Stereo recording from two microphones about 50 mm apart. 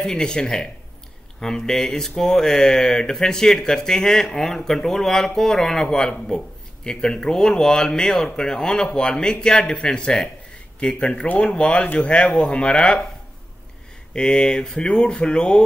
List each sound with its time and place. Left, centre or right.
0.0 s speech: centre
11.2 s speech: left
14.1 s speech: centre